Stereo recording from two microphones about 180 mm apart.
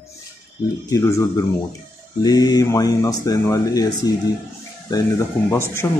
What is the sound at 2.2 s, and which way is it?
Speech, 20° left (ahead or behind).